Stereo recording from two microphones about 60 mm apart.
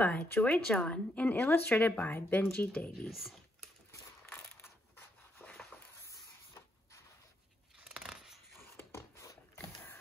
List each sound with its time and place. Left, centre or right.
0.0 s a woman's voice: left
0.8 s a woman's voice: left
3.1 s computer keyboard: centre
4.3 s crushing: left
5.4 s a sound: left
7.8 s scissors: centre
8.9 s a sound: left